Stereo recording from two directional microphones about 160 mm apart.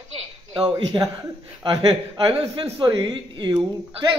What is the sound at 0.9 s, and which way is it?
A man's voice, 30° right (ahead or behind).